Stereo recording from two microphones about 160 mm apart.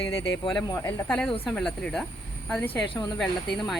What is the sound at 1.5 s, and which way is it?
Speech, 5° left (ahead or behind).